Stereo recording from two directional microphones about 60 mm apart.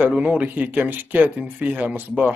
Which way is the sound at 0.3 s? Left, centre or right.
Right.